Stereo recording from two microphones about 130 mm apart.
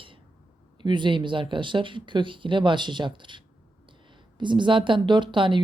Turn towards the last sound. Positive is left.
turn(degrees=-40)  # may be behind; listen again after turning